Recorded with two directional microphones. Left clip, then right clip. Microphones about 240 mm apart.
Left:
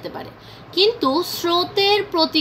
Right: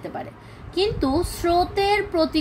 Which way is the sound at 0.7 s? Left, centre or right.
Right.